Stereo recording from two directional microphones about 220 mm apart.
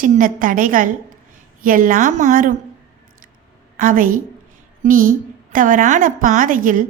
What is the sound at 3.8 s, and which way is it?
A woman's voice, 40° right (ahead or behind).